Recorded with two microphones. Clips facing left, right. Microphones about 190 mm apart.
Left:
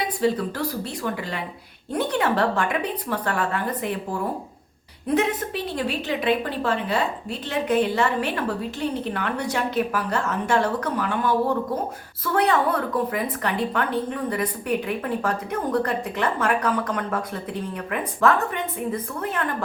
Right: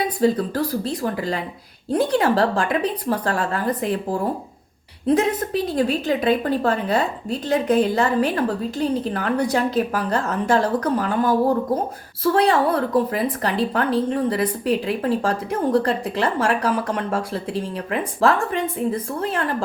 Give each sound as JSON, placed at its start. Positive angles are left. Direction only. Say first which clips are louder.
{"t": 0.2, "sound": "a woman's voice", "louder": "right 4 dB", "side_deg": -35}
{"t": 5.0, "sound": "a woman's voice", "louder": "right 4 dB", "side_deg": -40}